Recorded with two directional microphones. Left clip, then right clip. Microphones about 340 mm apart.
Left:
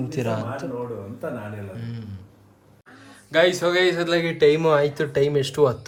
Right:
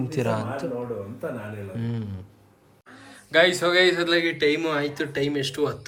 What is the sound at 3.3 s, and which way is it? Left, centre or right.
A man's voice, centre.